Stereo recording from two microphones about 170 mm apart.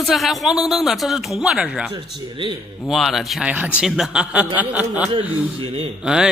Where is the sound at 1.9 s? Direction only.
30° right (ahead or behind).